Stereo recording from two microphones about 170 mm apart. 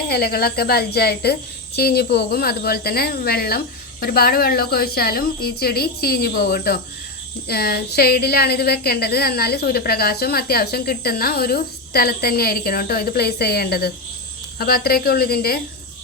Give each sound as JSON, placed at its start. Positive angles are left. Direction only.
{"t": 0.1, "sound": "a woman's voice", "side_deg": 65}